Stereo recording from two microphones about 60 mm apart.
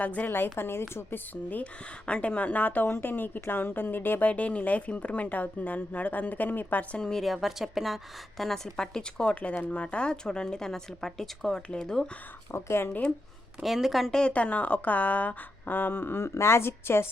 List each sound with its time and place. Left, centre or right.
0.0 s speech: left
0.3 s a woman's voice: left
2.0 s a woman's voice: left
4.3 s speech: left
6.9 s speech: centre
9.3 s speech: left
12.5 s speech: left
12.9 s speech: left
13.6 s a woman's voice: centre
14.1 s a woman's voice: centre; by 17.1 s left